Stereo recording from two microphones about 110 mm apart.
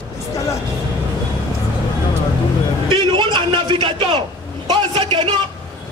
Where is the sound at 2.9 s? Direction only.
45° right (ahead or behind).